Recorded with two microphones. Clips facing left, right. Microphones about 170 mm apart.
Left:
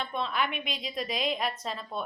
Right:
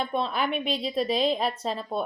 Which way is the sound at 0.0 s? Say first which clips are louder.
Right 4 dB; 35° right (ahead or behind).